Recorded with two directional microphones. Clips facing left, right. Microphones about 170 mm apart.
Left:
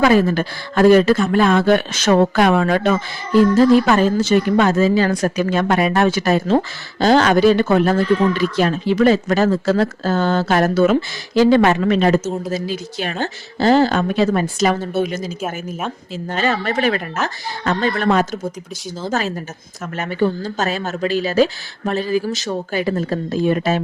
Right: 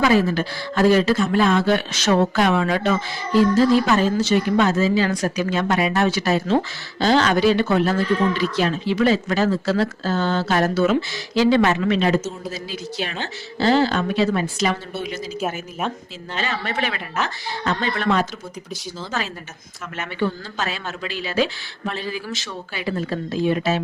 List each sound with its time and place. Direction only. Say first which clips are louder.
0.0 s speech: left 4 dB; 50° left (ahead or behind)
16.3 s speech: left 6 dB; 45° left (ahead or behind)